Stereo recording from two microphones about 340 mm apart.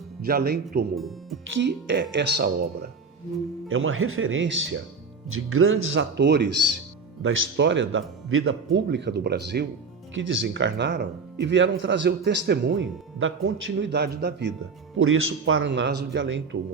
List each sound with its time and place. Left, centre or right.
0.2 s speech: right
0.9 s speech: centre
1.5 s speech: right
3.7 s speech: right